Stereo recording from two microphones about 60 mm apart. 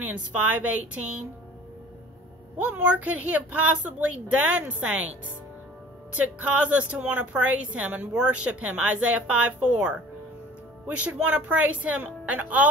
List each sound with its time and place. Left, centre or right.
0.0 s a woman's voice: right
2.5 s a woman's voice: right
6.1 s a woman's voice: right